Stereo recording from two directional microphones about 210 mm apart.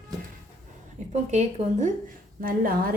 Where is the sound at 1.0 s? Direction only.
35° right (ahead or behind).